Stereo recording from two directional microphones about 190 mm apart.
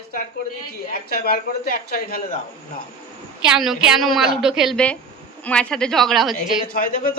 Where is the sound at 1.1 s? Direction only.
50° left (ahead or behind).